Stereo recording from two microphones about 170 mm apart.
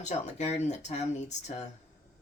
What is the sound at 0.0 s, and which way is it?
Speech, 45° left (ahead or behind).